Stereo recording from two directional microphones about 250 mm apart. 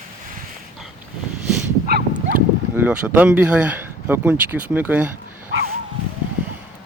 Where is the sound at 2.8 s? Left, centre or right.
Centre.